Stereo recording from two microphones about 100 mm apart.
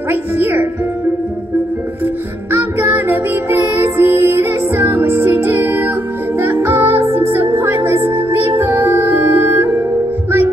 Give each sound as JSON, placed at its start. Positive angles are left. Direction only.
{"t": 0.4, "sound": "speech", "side_deg": -20}
{"t": 2.5, "sound": "music", "side_deg": -25}